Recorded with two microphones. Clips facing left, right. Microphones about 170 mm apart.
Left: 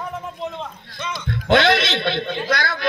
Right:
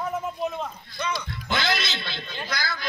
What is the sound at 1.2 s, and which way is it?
A man's voice, 70° left (ahead or behind).